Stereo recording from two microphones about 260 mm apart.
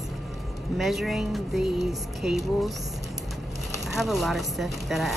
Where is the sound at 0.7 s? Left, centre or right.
Centre.